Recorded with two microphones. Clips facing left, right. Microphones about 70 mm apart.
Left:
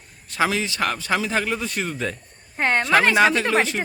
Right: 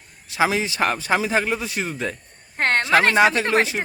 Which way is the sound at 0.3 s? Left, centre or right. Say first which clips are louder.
Right 2 dB; centre.